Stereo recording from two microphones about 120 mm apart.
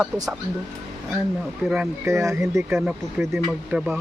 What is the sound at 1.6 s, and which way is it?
Speech, 10° right (ahead or behind).